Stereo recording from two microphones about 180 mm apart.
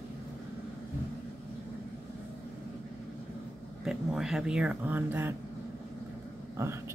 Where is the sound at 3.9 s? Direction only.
Centre (ahead or behind).